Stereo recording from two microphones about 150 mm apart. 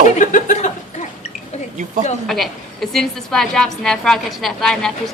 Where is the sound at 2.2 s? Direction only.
Centre (ahead or behind).